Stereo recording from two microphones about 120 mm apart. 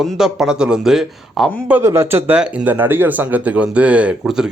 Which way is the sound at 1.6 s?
20° right (ahead or behind).